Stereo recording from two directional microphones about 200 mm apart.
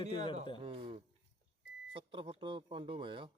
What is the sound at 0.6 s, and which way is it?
Speech, 25° right (ahead or behind).